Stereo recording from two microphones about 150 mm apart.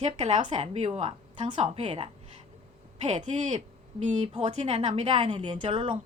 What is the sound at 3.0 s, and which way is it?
A woman's voice, 50° right (ahead or behind).